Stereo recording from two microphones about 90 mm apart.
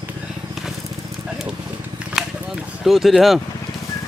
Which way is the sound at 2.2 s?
5° right (ahead or behind).